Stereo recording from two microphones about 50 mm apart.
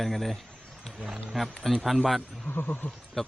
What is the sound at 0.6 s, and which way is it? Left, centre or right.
Roaring cats, centre.